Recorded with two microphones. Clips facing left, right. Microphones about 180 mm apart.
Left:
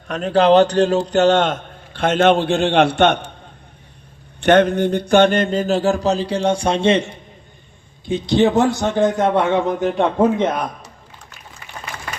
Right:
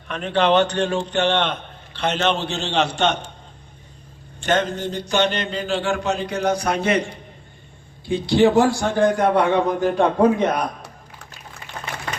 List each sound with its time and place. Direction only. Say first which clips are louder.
0.1 s a man's voice: left 5 dB; 40° left (ahead or behind); by 3.3 s 60° left (ahead or behind)
4.4 s a man's voice: left 8 dB; 60° left (ahead or behind); by 10.5 s 25° left (ahead or behind)